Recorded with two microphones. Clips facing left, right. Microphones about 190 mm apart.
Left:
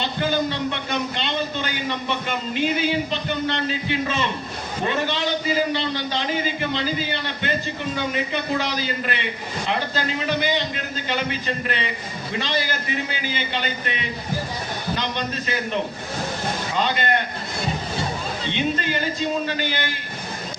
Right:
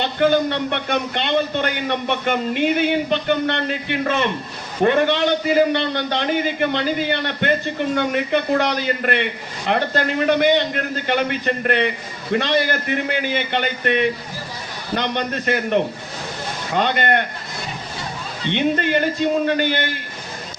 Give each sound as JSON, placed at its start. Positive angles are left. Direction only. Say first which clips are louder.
{"t": 0.0, "sound": "a man's voice", "louder": "right 6 dB", "side_deg": -60}
{"t": 18.4, "sound": "a man's voice", "louder": "right 6 dB", "side_deg": -60}